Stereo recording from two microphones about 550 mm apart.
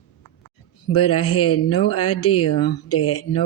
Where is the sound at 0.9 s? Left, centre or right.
Left.